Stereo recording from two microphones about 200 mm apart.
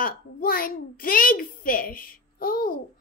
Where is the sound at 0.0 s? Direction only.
45° left (ahead or behind).